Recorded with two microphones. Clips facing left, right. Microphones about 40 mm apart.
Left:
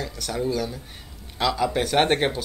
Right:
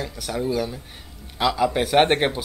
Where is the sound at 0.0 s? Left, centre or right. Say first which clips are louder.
Right 1 dB; centre.